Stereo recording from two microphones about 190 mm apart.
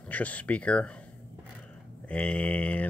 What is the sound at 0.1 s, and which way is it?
Speech, 10° left (ahead or behind).